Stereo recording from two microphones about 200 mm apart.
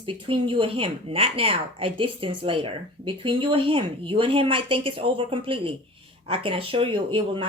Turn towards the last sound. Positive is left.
turn(degrees=-25)  # may be behind; listen again after turning